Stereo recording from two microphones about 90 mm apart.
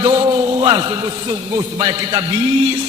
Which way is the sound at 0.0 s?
55° right (ahead or behind).